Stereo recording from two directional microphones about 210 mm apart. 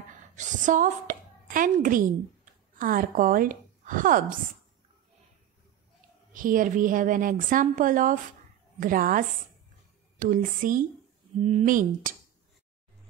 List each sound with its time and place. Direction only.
0.4 s a woman's voice: 35° right (ahead or behind)
6.3 s a woman's voice: 40° right (ahead or behind)